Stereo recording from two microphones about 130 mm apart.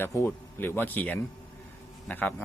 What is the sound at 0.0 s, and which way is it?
Speech, 20° left (ahead or behind).